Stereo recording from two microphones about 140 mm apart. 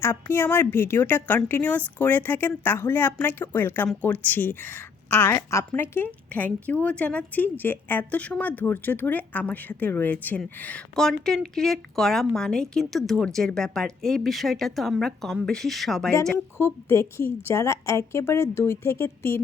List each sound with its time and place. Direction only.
0.0 s a woman's voice: 20° left (ahead or behind); by 16.1 s 5° left (ahead or behind)
16.6 s a woman's voice: 20° left (ahead or behind)